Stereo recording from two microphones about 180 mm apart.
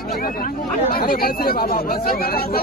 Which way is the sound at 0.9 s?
55° left (ahead or behind).